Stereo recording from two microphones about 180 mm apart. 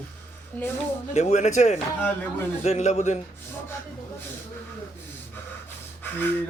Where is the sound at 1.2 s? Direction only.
40° left (ahead or behind).